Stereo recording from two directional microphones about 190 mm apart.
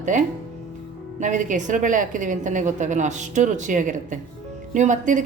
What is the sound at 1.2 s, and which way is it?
A woman's voice, 40° right (ahead or behind).